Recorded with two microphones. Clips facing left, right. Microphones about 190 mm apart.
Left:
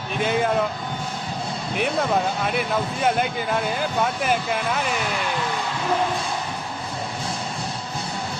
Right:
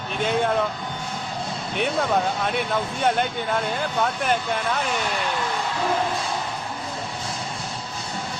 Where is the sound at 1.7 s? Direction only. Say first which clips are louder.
Even; centre (ahead or behind).